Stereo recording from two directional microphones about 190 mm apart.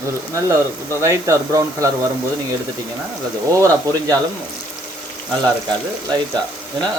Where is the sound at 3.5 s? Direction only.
15° right (ahead or behind).